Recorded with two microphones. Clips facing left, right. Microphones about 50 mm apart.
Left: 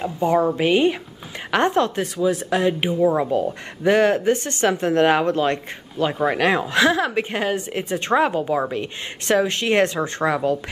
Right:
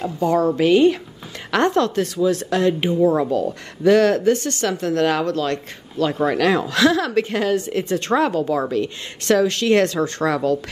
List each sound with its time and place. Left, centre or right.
0.0 s a woman's voice: centre